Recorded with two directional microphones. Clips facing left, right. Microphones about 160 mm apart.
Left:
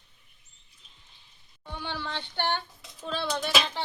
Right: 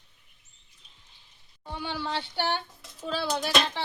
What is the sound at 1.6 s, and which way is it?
A woman's voice, 10° right (ahead or behind).